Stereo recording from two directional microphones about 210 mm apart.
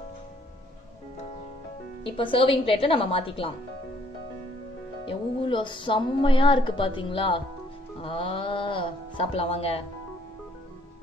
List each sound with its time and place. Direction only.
2.0 s music: 25° left (ahead or behind)
5.0 s music: 25° left (ahead or behind)